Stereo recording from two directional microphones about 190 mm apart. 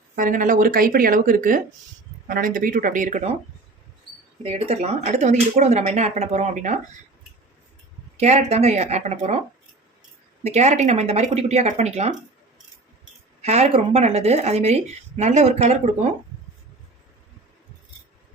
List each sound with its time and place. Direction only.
0.2 s speech: 45° right (ahead or behind)
4.4 s speech: 30° right (ahead or behind)
8.1 s speech: 35° right (ahead or behind)
10.4 s speech: 35° right (ahead or behind)
13.4 s speech: 35° right (ahead or behind)